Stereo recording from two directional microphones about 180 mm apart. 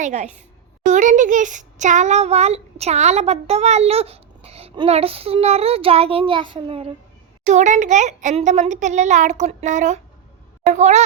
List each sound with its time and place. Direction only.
0.0 s a child's voice: 40° right (ahead or behind)